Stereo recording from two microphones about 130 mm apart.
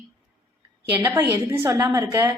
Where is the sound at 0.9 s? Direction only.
20° right (ahead or behind).